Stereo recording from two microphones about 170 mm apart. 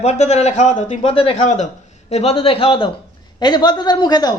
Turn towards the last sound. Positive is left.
turn(degrees=25)  # may be behind; listen again after turning